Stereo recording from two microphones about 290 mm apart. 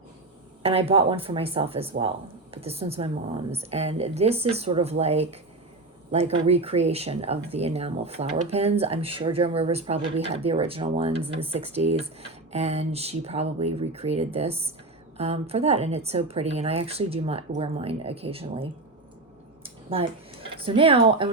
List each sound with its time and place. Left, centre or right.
0.6 s speech: centre
19.6 s a sound: centre
20.6 s speech: centre